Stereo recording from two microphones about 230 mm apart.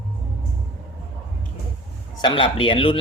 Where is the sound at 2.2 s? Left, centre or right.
Left.